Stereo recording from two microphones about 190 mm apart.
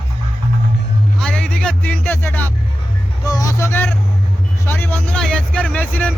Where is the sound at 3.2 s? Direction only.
20° left (ahead or behind).